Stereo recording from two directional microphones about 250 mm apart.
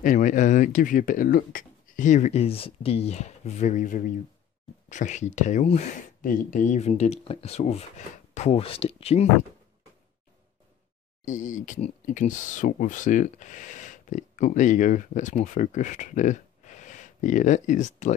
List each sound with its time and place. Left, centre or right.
0.0 s speech: left
11.2 s speech: left